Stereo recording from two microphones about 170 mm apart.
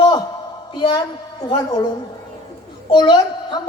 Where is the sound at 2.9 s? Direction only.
30° left (ahead or behind).